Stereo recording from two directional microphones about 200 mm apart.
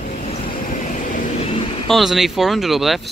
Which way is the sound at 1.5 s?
25° left (ahead or behind).